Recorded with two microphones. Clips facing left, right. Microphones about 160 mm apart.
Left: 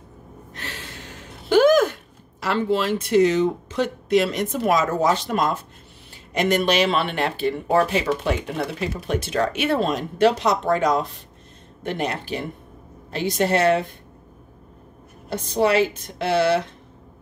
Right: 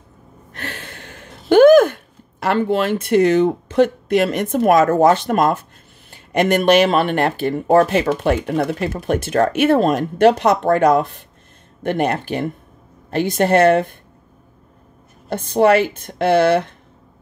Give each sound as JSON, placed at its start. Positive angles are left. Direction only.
{"t": 0.5, "sound": "a sound", "side_deg": -55}
{"t": 2.4, "sound": "speech", "side_deg": -55}
{"t": 15.2, "sound": "speech", "side_deg": -55}